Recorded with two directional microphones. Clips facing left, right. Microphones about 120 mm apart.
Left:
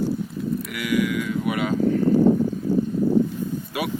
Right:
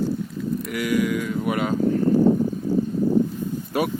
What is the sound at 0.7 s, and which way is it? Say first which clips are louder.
Speech: right 2 dB; 35° right (ahead or behind).